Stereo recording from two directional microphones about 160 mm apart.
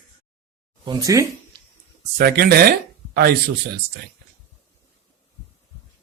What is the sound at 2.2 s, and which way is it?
Speech, 70° right (ahead or behind).